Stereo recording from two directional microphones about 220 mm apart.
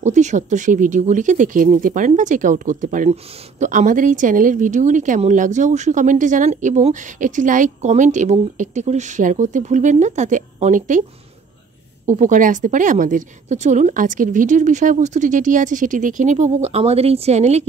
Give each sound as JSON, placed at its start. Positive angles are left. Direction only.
{"t": 0.0, "sound": "speech", "side_deg": -35}
{"t": 12.1, "sound": "speech", "side_deg": -35}